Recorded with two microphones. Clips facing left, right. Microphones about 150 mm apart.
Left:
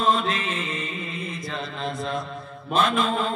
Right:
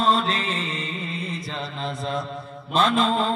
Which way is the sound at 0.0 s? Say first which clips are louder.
Right 1 dB; 35° right (ahead or behind).